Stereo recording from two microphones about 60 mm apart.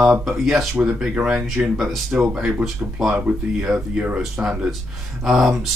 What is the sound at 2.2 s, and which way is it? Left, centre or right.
Speech, centre.